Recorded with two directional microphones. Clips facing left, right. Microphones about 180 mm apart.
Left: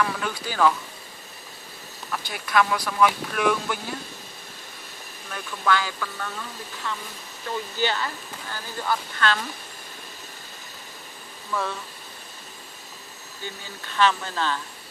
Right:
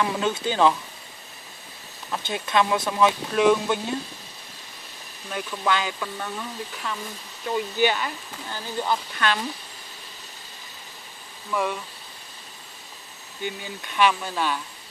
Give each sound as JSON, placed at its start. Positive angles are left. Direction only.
{"t": 0.0, "sound": "speech", "side_deg": -20}
{"t": 2.0, "sound": "speech", "side_deg": -25}
{"t": 5.3, "sound": "speech", "side_deg": -20}
{"t": 11.5, "sound": "speech", "side_deg": -15}
{"t": 13.4, "sound": "speech", "side_deg": -15}